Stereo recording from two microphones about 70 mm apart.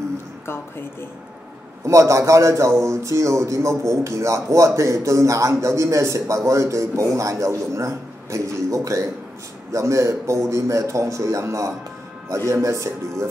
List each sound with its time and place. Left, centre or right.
1.9 s a man's voice: right